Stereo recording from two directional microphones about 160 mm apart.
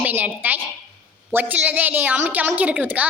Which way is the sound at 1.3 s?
10° right (ahead or behind).